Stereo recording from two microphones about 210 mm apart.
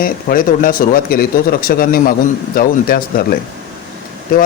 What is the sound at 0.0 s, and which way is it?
A man's voice, 40° left (ahead or behind).